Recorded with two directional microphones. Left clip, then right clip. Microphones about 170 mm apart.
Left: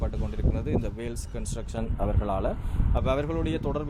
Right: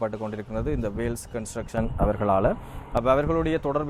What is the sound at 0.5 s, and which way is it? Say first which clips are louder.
Speech: right 3 dB; 30° right (ahead or behind).